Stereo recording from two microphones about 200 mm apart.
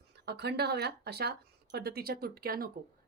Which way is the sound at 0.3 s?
55° right (ahead or behind).